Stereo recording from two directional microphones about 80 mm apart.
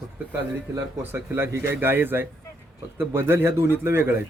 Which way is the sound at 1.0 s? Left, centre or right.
Right.